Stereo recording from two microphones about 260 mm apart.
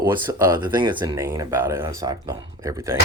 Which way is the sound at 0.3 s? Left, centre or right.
Centre.